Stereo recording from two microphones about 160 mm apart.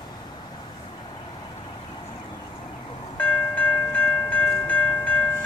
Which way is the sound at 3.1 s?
10° left (ahead or behind).